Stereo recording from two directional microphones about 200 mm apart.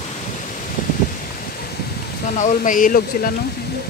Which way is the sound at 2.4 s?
40° left (ahead or behind).